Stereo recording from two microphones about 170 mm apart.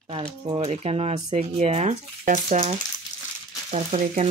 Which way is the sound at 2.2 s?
50° right (ahead or behind).